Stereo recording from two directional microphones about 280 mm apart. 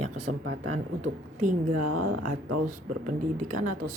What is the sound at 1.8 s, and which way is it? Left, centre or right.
Speech, right.